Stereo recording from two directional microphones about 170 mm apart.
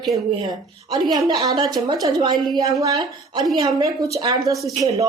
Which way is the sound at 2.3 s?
Centre (ahead or behind).